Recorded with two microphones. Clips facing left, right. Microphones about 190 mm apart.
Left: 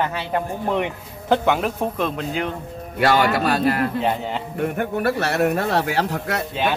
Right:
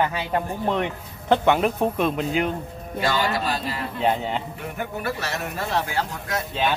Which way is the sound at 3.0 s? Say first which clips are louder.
Left 6 dB; 65° left (ahead or behind).